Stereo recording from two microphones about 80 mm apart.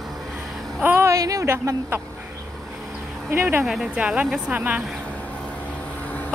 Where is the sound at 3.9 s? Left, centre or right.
Centre.